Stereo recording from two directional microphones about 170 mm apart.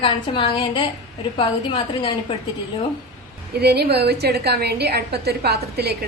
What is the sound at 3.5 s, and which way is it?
A woman's voice, 70° right (ahead or behind).